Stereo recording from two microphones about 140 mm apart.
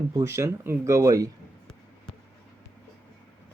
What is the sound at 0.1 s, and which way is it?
Speech, 20° right (ahead or behind).